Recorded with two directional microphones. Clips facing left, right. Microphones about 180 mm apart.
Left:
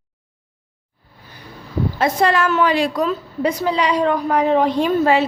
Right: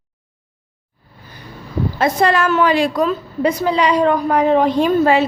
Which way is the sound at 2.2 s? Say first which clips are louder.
Right 2 dB; 45° right (ahead or behind).